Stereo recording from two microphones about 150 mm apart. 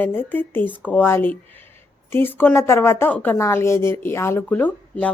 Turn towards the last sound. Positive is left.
turn(degrees=10)  # may be behind; listen again after turning